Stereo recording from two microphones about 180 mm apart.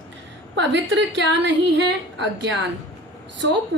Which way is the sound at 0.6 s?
90° right.